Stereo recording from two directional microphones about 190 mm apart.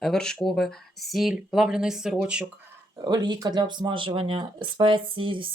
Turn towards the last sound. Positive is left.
turn(degrees=-25)  # may be behind; listen again after turning